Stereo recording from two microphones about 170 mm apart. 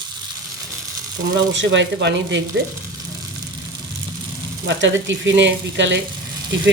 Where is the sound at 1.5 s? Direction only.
90° right.